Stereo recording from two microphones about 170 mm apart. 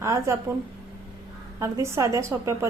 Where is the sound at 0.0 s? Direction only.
15° right (ahead or behind).